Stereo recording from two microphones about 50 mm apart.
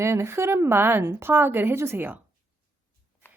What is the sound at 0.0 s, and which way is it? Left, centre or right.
A woman's voice, right.